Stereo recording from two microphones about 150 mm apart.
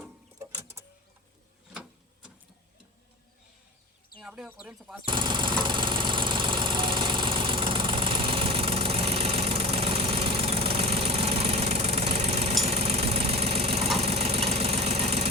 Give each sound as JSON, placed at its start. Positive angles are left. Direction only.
{"t": 0.3, "sound": "vehicle", "side_deg": -15}
{"t": 1.7, "sound": "printer", "side_deg": -5}
{"t": 4.2, "sound": "chicken", "side_deg": 0}
{"t": 4.4, "sound": "speech", "side_deg": -10}
{"t": 5.0, "sound": "engine", "side_deg": -30}